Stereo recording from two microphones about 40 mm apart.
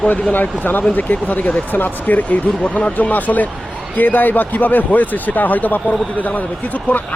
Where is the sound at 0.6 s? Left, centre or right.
Left.